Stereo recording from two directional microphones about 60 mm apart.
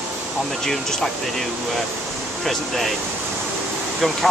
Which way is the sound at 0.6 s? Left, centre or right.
Centre.